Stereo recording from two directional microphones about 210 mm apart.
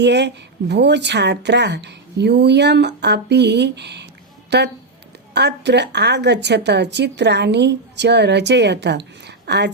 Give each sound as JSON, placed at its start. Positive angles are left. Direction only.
{"t": 0.0, "sound": "speech", "side_deg": -55}